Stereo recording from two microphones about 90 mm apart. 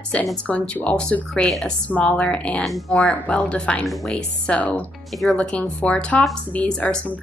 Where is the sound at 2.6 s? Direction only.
Centre (ahead or behind).